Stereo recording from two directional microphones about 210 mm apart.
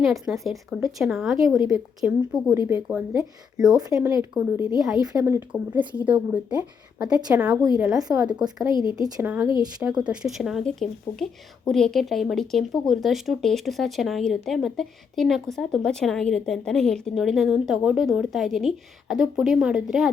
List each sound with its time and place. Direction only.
0.0 s a woman's voice: centre (ahead or behind)
3.8 s a woman's voice: 15° right (ahead or behind)
7.0 s a woman's voice: 20° right (ahead or behind)
8.7 s speech: 25° left (ahead or behind)
9.0 s a woman's voice: 15° right (ahead or behind)
10.0 s speech: 5° right (ahead or behind)